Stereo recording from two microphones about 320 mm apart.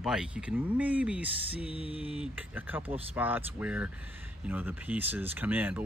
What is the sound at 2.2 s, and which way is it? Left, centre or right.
Speech, centre.